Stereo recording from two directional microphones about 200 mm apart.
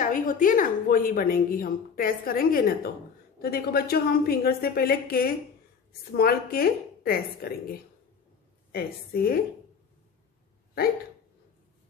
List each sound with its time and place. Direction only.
0.0 s a woman's voice: 45° left (ahead or behind)
8.7 s a woman's voice: 50° left (ahead or behind)